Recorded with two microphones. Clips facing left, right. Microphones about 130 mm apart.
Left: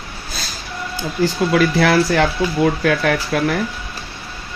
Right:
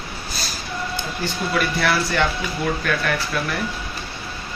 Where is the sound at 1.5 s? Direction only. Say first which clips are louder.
Left 5 dB; 90° left.